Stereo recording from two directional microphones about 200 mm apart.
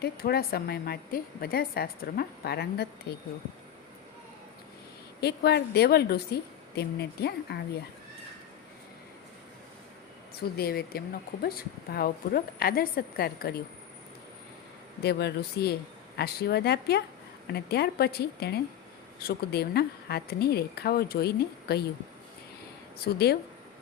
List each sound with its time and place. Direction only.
0.0 s a woman's voice: 50° left (ahead or behind)
5.2 s a woman's voice: 55° left (ahead or behind)
10.6 s a woman's voice: 50° left (ahead or behind)
15.0 s a woman's voice: 55° left (ahead or behind)
23.1 s a woman's voice: 50° left (ahead or behind)